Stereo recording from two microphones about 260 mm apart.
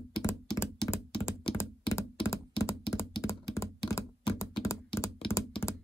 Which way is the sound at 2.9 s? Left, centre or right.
Centre.